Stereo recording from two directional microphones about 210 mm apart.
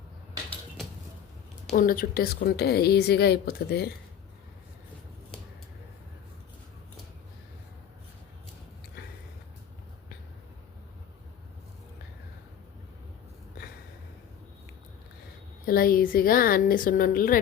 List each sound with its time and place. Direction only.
1.7 s a woman's voice: 45° left (ahead or behind)
15.6 s a woman's voice: 45° left (ahead or behind)